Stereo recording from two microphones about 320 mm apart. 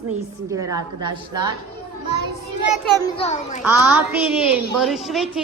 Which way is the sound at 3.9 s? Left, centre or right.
Centre.